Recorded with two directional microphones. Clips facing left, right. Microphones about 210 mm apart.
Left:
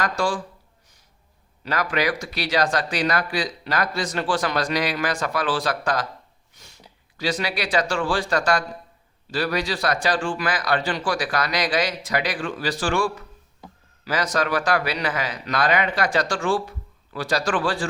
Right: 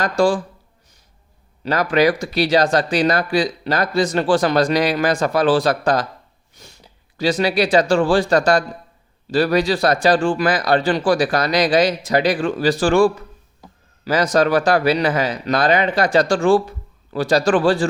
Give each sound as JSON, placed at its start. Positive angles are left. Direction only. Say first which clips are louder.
{"t": 0.0, "sound": "a man's voice", "louder": "right 7 dB", "side_deg": -30}
{"t": 1.6, "sound": "a man's voice", "louder": "right 8 dB", "side_deg": -30}
{"t": 7.4, "sound": "a man's voice", "louder": "right 10 dB", "side_deg": -25}